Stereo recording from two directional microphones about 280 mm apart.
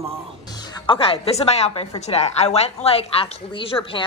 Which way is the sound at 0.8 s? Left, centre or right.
Centre.